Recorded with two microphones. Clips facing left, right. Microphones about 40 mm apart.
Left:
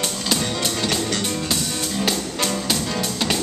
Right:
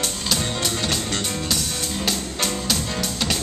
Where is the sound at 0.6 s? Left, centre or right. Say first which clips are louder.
Left 2 dB; left.